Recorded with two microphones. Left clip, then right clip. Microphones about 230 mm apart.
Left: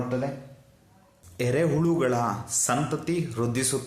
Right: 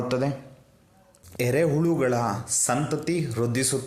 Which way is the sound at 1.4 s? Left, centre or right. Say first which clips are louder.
Right 2 dB; right.